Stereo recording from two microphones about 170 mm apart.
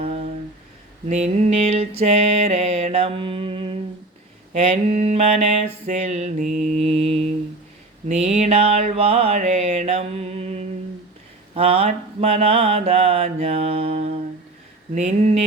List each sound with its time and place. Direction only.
0.0 s a sound: 35° right (ahead or behind)
1.1 s mantra: 40° right (ahead or behind)
4.5 s mantra: 45° right (ahead or behind)
6.9 s mantra: 35° right (ahead or behind)